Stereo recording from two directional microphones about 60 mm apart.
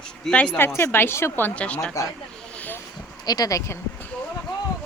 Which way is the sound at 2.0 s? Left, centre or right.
Left.